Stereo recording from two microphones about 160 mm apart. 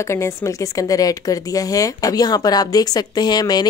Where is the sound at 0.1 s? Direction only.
15° left (ahead or behind).